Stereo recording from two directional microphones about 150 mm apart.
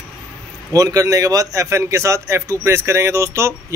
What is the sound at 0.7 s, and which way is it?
A man's voice, 25° right (ahead or behind).